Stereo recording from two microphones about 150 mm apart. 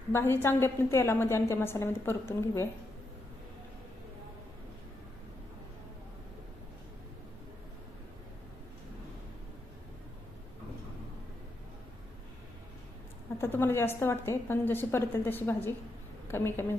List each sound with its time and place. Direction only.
0.1 s a woman's voice: 15° left (ahead or behind)
13.4 s a woman's voice: 15° left (ahead or behind)